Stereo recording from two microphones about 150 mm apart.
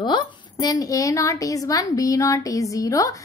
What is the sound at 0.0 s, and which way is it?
A woman's voice, 30° left (ahead or behind).